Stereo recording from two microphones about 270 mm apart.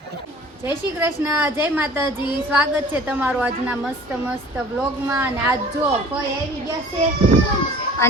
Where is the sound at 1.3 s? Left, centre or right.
Centre.